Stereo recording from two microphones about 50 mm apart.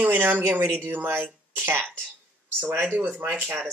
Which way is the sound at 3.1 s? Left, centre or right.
Right.